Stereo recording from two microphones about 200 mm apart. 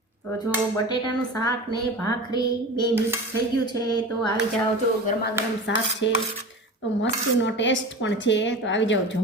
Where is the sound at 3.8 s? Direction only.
20° left (ahead or behind).